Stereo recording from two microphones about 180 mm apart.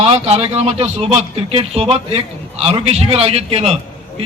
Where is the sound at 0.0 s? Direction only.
35° right (ahead or behind).